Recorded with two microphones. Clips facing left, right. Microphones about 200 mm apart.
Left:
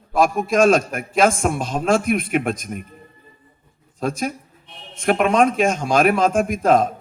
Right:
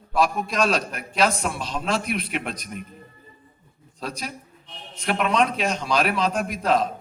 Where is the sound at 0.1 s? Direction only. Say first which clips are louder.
Left 5 dB; 50° left (ahead or behind).